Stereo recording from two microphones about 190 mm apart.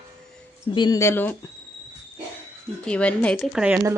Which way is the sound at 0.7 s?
20° left (ahead or behind).